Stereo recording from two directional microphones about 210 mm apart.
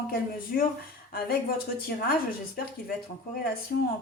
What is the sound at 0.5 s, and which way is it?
Speech, 45° left (ahead or behind).